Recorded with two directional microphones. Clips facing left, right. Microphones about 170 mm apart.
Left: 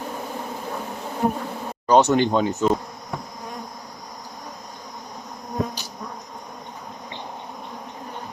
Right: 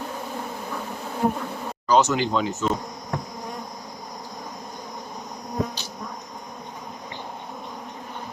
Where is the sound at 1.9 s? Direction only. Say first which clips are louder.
Left 3 dB; 60° left (ahead or behind).